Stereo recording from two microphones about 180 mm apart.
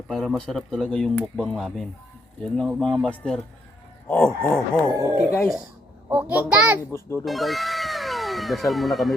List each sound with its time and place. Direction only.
0.1 s speech: 5° left (ahead or behind)
4.1 s chicken: 5° left (ahead or behind)
4.9 s speech: 20° right (ahead or behind)
6.3 s a child's voice: 10° right (ahead or behind)
6.9 s chicken: 15° left (ahead or behind)
7.3 s speech: centre (ahead or behind)